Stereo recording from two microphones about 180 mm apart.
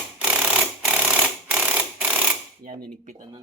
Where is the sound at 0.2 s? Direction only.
5° right (ahead or behind).